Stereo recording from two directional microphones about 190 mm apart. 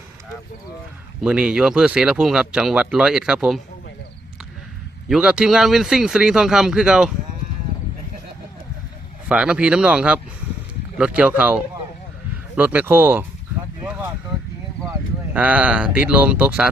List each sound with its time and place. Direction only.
1.2 s speech: 5° right (ahead or behind)
5.0 s speech: 5° right (ahead or behind)
9.3 s speech: 5° right (ahead or behind)
14.8 s speech: 10° right (ahead or behind)